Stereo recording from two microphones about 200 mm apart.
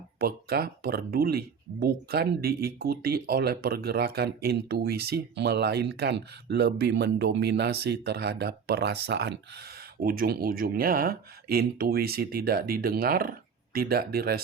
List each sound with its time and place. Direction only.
0.2 s speech: 50° right (ahead or behind)
10.0 s speech: 45° right (ahead or behind)